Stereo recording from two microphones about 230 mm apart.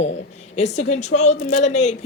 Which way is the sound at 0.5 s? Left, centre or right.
Left.